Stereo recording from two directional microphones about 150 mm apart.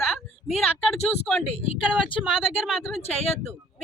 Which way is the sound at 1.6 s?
40° left (ahead or behind).